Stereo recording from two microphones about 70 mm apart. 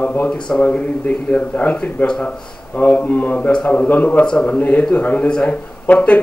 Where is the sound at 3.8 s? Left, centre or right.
Left.